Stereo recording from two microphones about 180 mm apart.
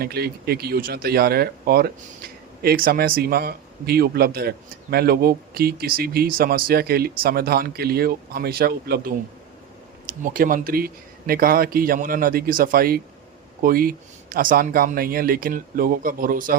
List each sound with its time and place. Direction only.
0.0 s speech: 60° right (ahead or behind)
10.3 s speech: 50° right (ahead or behind)